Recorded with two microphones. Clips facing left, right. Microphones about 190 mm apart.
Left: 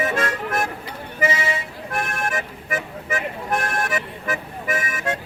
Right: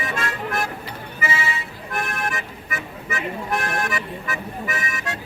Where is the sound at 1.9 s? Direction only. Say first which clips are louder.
Left 1 dB; 45° left (ahead or behind).